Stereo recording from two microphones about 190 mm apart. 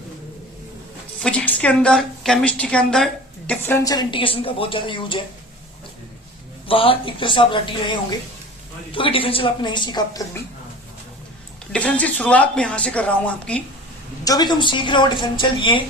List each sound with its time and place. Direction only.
1.2 s a woman's voice: 5° left (ahead or behind); by 5.2 s 25° left (ahead or behind)
6.7 s a woman's voice: 30° left (ahead or behind)
11.7 s a woman's voice: 5° left (ahead or behind)
14.3 s a woman's voice: 20° left (ahead or behind)